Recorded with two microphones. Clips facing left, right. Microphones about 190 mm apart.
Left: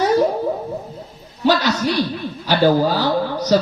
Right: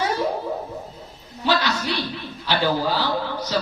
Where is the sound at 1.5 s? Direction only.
45° left (ahead or behind).